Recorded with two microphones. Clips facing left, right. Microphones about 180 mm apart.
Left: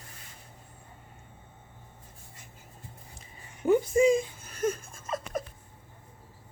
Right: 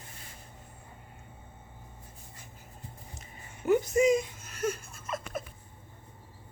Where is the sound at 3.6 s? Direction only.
30° left (ahead or behind).